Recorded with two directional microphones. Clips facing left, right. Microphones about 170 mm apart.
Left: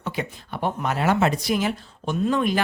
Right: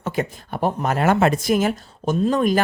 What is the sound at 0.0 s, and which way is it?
Speech, 45° right (ahead or behind).